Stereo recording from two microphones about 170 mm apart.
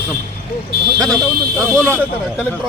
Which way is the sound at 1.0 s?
5° left (ahead or behind).